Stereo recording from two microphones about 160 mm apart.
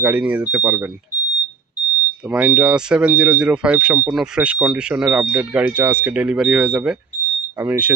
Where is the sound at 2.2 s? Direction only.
5° right (ahead or behind).